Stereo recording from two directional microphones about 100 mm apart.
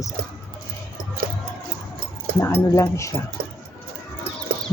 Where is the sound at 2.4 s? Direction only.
30° left (ahead or behind).